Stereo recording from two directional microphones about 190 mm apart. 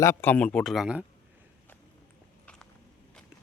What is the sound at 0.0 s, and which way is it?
Speech, 15° left (ahead or behind).